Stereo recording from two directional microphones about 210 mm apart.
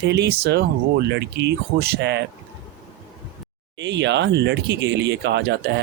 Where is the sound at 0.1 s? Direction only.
55° right (ahead or behind).